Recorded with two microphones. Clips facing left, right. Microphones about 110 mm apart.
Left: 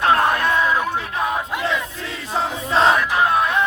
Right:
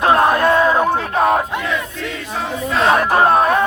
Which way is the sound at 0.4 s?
45° right (ahead or behind).